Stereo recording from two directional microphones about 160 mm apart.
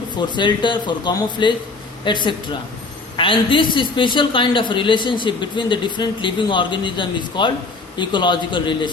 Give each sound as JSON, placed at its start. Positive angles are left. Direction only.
{"t": 0.2, "sound": "a woman's voice", "side_deg": 30}